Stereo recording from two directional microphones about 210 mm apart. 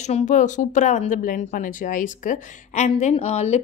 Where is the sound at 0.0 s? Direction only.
35° left (ahead or behind).